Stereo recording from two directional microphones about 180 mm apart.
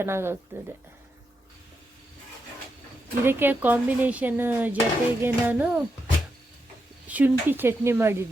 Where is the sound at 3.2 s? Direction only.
10° right (ahead or behind).